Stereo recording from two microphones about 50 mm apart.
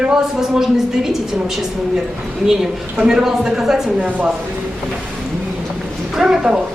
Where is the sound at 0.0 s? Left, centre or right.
Centre.